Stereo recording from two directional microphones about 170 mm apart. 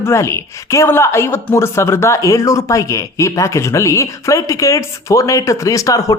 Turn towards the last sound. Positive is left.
turn(degrees=20)  # may be behind; listen again after turning